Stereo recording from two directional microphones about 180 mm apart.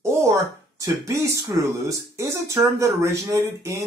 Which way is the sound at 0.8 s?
15° right (ahead or behind).